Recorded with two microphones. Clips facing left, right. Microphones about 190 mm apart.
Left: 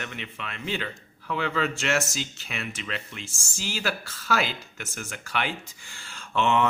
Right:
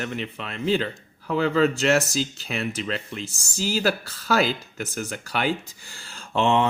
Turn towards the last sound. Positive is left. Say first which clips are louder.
# right 2 dB
turn(degrees=-30)  # may be behind; listen again after turning